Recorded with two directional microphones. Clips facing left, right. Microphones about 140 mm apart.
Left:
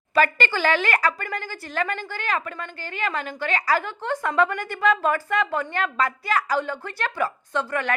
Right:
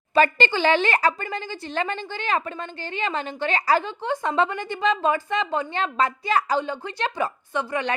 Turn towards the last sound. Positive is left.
turn(degrees=-15)  # may be behind; listen again after turning